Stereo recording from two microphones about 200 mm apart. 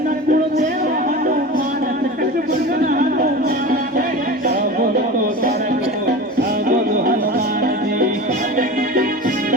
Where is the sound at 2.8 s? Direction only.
45° right (ahead or behind).